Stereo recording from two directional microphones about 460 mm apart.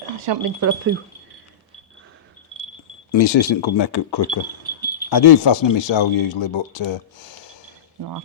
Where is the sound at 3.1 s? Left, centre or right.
Left.